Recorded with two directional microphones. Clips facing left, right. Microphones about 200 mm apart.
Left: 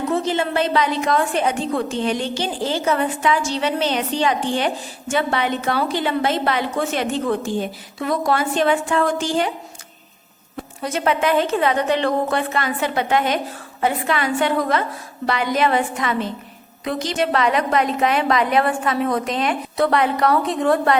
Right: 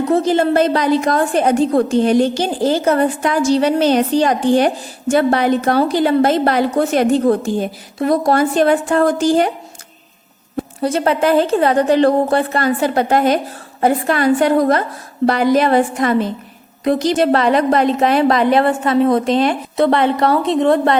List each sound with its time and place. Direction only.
0.1 s a woman's voice: 40° right (ahead or behind)
10.6 s a woman's voice: 35° right (ahead or behind)